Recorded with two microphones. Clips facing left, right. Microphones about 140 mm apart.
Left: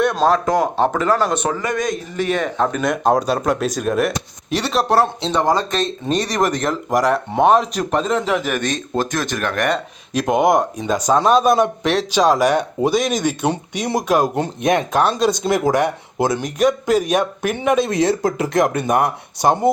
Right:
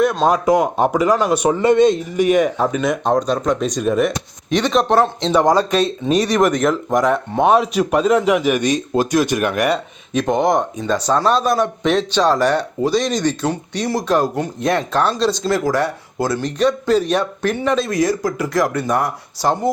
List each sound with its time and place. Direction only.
0.0 s a sound: centre (ahead or behind)
0.3 s speech: 15° right (ahead or behind)
1.5 s speech: 25° right (ahead or behind)
2.1 s speech: 15° right (ahead or behind); by 5.3 s 5° left (ahead or behind)
5.5 s speech: 10° right (ahead or behind); by 11.7 s 20° left (ahead or behind)
11.8 s speech: 5° left (ahead or behind)
13.4 s speech: 20° left (ahead or behind)